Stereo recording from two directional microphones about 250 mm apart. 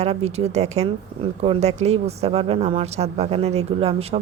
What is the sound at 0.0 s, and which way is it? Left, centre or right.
A woman's voice, right.